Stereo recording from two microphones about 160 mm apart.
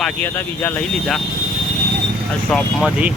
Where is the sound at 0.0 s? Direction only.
10° left (ahead or behind).